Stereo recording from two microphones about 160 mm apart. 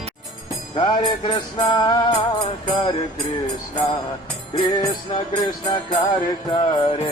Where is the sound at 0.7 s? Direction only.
30° left (ahead or behind).